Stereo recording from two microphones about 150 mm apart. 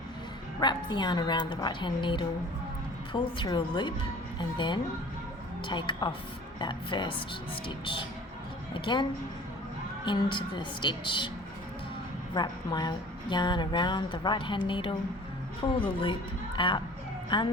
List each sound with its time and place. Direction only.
0.6 s a woman's voice: 30° left (ahead or behind)
8.7 s speech: 30° left (ahead or behind)
10.1 s a woman's voice: 30° left (ahead or behind)
12.3 s a woman's voice: 30° left (ahead or behind)